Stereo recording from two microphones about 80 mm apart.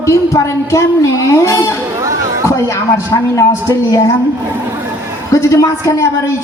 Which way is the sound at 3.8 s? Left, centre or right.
Left.